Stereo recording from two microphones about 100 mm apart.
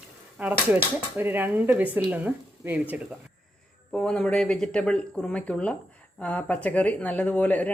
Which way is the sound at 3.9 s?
5° left (ahead or behind).